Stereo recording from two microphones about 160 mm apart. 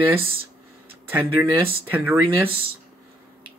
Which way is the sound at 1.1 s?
10° right (ahead or behind).